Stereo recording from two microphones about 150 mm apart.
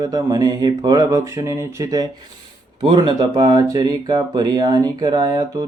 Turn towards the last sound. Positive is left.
turn(degrees=-25)  # may be behind; listen again after turning